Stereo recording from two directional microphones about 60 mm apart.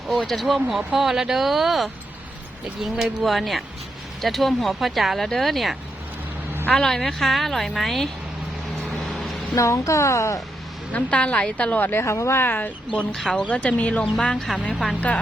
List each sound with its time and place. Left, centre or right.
0.1 s speech: centre
3.0 s speech: centre
9.0 s vehicle: centre
9.6 s speech: left
10.9 s speech: left
11.8 s speech: left
12.0 s a woman's voice: left
12.5 s speech: left
13.1 s speech: centre
13.5 s speech: left